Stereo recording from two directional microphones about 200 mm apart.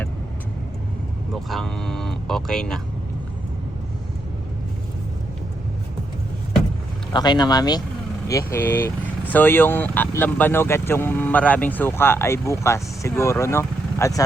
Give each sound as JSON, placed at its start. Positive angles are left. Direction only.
{"t": 1.5, "sound": "speech", "side_deg": 0}
{"t": 7.1, "sound": "speech", "side_deg": 20}